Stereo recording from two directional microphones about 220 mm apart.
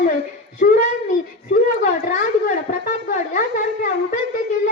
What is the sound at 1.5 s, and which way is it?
A woman's voice, 40° left (ahead or behind).